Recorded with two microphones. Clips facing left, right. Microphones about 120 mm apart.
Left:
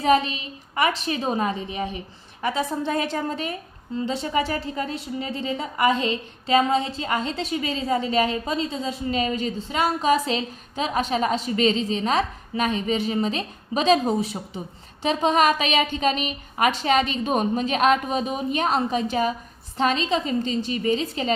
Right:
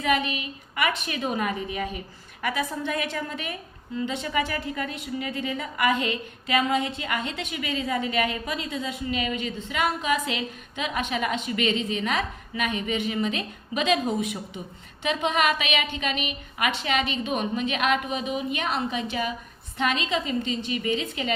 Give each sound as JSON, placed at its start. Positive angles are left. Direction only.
{"t": 0.0, "sound": "a woman's voice", "side_deg": 30}